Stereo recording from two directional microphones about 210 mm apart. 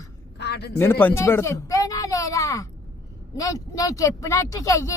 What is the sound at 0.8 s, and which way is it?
Speech, 10° left (ahead or behind).